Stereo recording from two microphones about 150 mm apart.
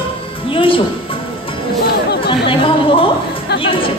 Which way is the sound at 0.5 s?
35° left (ahead or behind).